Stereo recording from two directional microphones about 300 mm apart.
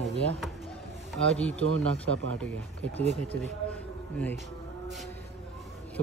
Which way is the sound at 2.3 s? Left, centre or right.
Centre.